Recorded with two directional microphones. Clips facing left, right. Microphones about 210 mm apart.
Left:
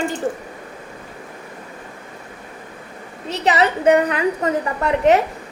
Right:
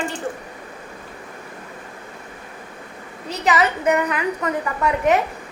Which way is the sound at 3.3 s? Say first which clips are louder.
Left 2 dB; 30° left (ahead or behind).